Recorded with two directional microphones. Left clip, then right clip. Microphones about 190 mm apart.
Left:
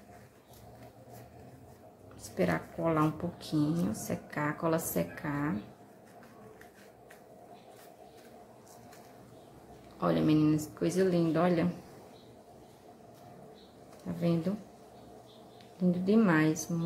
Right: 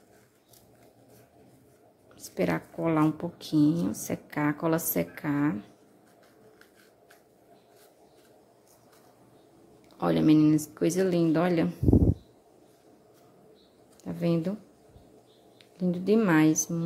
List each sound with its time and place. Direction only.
2.2 s speech: 40° right (ahead or behind)
9.9 s speech: 45° right (ahead or behind)
14.0 s a sound: 45° right (ahead or behind)
15.8 s speech: 45° right (ahead or behind)